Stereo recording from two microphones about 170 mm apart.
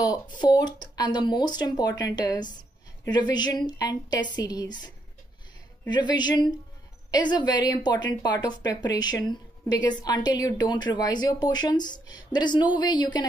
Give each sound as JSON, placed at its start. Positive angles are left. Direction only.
{"t": 0.0, "sound": "a woman's voice", "side_deg": 25}